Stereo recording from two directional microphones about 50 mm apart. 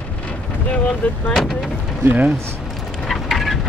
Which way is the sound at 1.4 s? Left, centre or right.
Centre.